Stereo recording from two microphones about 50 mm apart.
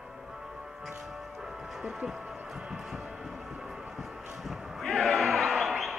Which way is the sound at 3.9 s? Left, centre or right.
Centre.